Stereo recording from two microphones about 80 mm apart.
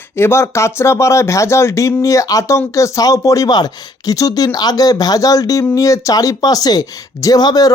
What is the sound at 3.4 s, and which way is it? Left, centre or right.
Speech, left.